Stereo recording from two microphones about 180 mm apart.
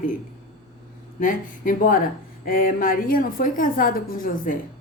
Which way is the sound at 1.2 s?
50° left (ahead or behind).